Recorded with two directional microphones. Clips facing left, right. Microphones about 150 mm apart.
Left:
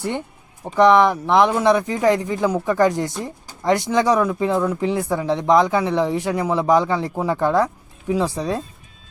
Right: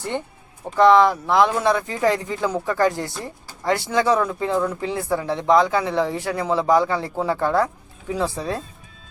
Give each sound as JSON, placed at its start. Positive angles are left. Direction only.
{"t": 0.8, "sound": "speech", "side_deg": 20}